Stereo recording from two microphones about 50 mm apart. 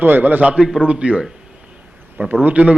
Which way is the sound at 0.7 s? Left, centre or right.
Right.